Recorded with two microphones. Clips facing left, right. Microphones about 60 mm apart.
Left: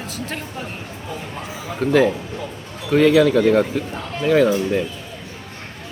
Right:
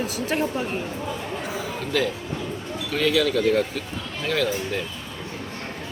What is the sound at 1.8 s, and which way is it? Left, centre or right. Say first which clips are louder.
Speech: left 10 dB; left.